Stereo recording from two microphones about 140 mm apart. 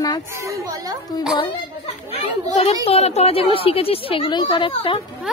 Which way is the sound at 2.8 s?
45° left (ahead or behind).